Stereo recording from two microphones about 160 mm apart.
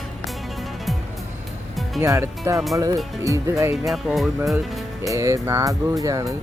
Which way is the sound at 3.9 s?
Centre (ahead or behind).